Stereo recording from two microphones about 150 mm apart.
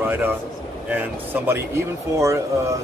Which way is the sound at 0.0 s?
15° right (ahead or behind).